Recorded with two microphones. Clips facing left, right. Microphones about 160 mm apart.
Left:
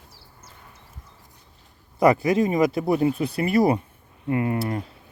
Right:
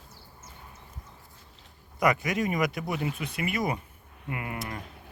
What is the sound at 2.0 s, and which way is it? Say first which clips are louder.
Speech: left 8 dB; 30° left (ahead or behind).